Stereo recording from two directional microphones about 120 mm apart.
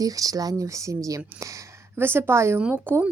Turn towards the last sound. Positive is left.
turn(degrees=-20)  # may be behind; listen again after turning